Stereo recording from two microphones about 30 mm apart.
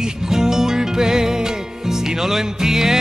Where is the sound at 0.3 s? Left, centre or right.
Centre.